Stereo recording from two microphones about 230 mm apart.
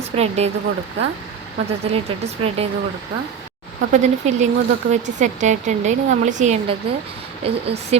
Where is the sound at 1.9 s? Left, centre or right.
Right.